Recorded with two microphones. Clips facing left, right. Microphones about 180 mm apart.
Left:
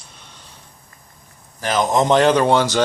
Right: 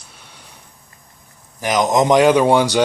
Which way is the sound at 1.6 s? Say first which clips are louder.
Right 2 dB; 15° right (ahead or behind).